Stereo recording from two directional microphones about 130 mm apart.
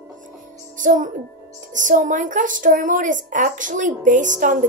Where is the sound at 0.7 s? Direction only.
85° right.